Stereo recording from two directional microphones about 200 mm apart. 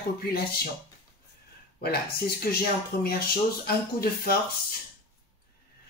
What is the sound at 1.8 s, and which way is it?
Speech, 50° left (ahead or behind).